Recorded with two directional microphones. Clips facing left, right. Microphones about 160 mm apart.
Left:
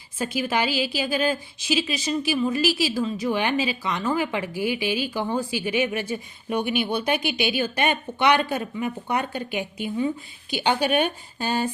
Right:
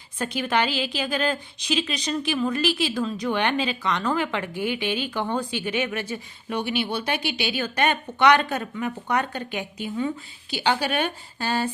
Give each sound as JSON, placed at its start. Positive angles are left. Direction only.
{"t": 0.2, "sound": "speech", "side_deg": 5}